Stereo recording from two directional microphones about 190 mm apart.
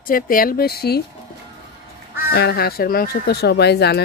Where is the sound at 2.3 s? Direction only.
55° left (ahead or behind).